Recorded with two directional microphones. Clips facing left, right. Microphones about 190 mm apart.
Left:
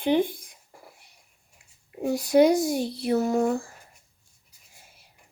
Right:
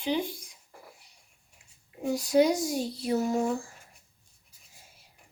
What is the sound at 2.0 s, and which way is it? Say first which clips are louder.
A child's voice: left 4 dB; 60° left (ahead or behind).